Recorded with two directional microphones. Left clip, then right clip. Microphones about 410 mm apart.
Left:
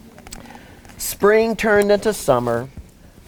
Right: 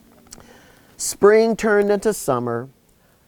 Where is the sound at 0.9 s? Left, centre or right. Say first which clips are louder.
Right 1 dB; right.